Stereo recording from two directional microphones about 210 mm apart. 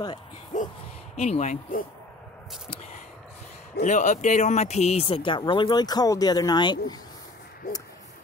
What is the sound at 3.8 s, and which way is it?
Speech, 35° left (ahead or behind).